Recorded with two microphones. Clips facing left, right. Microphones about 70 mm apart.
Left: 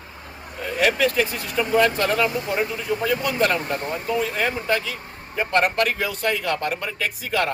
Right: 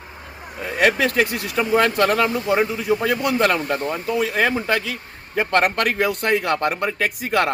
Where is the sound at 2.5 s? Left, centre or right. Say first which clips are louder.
Right 5 dB; right.